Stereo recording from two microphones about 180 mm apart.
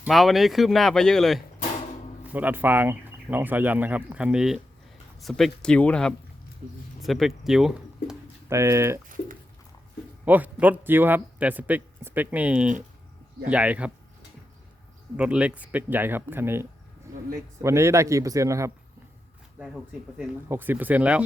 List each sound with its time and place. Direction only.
0.0 s speech: centre (ahead or behind)
2.2 s speech: 10° right (ahead or behind)
8.4 s speech: 15° right (ahead or behind)
10.2 s speech: 10° right (ahead or behind)
15.1 s speech: 5° right (ahead or behind)
19.5 s speech: 5° right (ahead or behind)